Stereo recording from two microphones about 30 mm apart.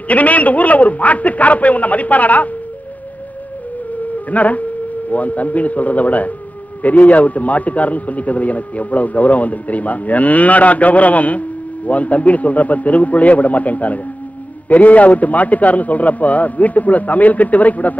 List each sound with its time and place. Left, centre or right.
0.1 s a man's voice: left
4.3 s a man's voice: left